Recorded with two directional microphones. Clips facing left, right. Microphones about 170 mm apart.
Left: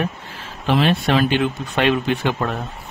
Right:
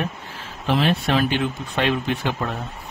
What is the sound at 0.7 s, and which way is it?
Speech, 90° left.